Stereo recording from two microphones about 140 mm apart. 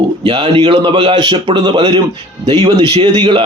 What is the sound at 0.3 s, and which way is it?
Speech, 40° right (ahead or behind).